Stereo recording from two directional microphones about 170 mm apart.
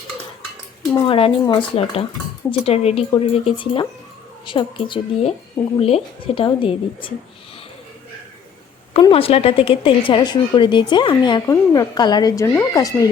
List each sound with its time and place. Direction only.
1.0 s a woman's voice: 30° left (ahead or behind)
8.9 s a woman's voice: 30° left (ahead or behind)